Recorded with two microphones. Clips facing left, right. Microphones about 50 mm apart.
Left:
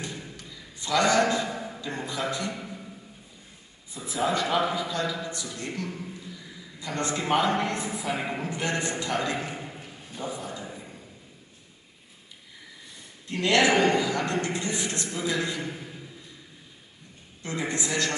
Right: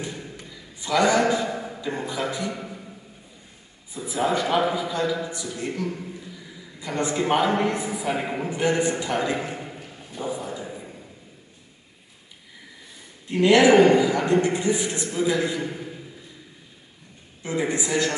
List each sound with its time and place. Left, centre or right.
0.4 s a sound: centre
1.8 s a man's voice: centre
3.9 s a man's voice: centre
6.8 s a man's voice: centre
13.3 s a man's voice: centre
17.4 s a man's voice: centre